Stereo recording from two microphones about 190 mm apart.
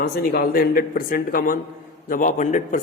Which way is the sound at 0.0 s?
55° left (ahead or behind).